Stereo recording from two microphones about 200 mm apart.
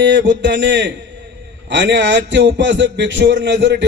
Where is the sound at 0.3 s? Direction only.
65° right (ahead or behind).